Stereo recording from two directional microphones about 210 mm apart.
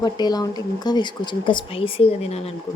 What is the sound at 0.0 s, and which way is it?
Speech, 20° left (ahead or behind).